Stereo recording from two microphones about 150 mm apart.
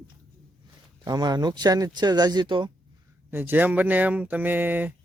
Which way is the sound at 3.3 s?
10° right (ahead or behind).